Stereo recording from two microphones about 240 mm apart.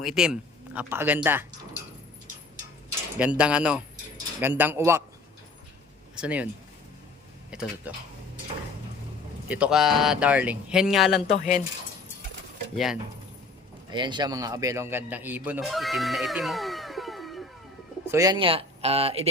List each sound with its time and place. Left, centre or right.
0.0 s speech: centre
3.2 s speech: centre
6.1 s speech: centre
7.5 s speech: centre
9.5 s speech: centre
11.3 s speech: left
12.7 s speech: centre
13.9 s speech: centre
18.1 s speech: centre